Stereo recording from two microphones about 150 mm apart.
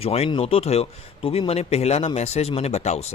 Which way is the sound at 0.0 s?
45° left (ahead or behind).